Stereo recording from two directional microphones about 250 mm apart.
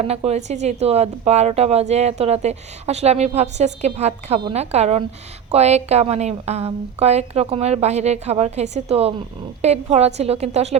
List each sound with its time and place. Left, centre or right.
0.1 s a woman's voice: right